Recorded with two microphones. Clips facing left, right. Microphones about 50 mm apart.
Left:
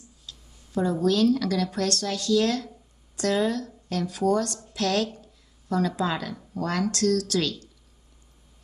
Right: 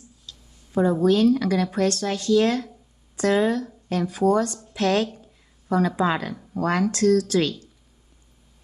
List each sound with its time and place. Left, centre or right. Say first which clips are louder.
0.7 s speech: right 4 dB; right
5.1 s a sound: right 1 dB; right
6.5 s speech: right 5 dB; right